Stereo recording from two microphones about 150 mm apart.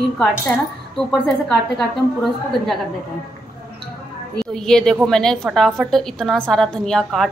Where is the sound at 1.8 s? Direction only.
Centre (ahead or behind).